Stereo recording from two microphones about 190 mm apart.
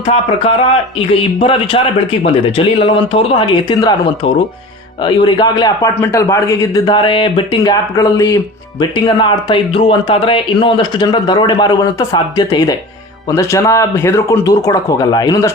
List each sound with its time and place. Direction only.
0.0 s a man's voice: 30° left (ahead or behind)